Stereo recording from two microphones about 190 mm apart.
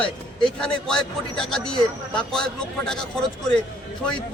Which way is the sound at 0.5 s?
5° left (ahead or behind).